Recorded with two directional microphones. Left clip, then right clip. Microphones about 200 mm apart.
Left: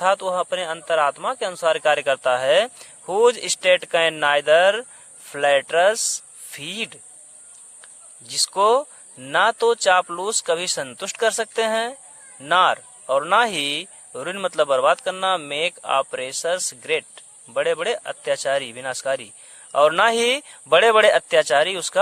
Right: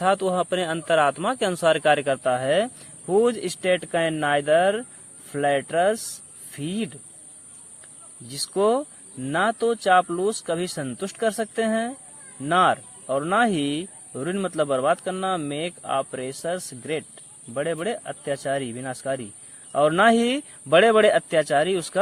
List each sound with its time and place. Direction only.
0.0 s speech: 20° left (ahead or behind)
8.3 s speech: 25° left (ahead or behind)